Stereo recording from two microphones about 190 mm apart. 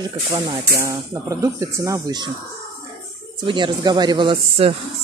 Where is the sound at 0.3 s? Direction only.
15° right (ahead or behind).